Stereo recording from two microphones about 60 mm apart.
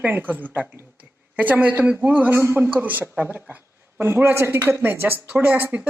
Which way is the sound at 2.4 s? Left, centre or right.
Right.